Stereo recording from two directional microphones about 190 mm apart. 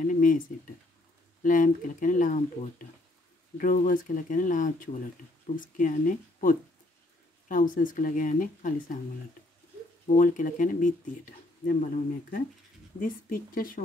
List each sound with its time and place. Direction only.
0.1 s speech: 45° left (ahead or behind)
1.4 s speech: 45° left (ahead or behind)
3.5 s speech: 45° left (ahead or behind)
10.0 s speech: 45° left (ahead or behind)